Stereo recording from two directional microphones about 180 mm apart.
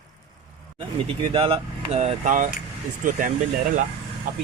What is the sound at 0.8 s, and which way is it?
Speech, 30° right (ahead or behind).